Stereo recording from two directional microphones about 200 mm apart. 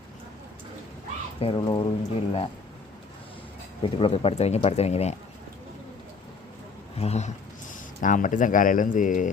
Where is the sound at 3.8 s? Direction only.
25° left (ahead or behind).